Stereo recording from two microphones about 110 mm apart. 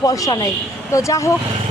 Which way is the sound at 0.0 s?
30° left (ahead or behind).